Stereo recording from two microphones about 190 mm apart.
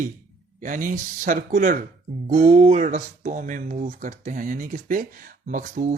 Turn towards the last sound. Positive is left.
turn(degrees=-45)  # may be behind; listen again after turning